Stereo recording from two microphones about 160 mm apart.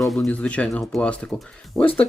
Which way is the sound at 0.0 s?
Centre (ahead or behind).